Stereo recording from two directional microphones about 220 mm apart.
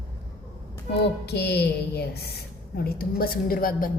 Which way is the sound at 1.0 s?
50° left (ahead or behind).